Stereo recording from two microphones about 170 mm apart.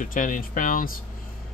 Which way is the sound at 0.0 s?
50° left (ahead or behind).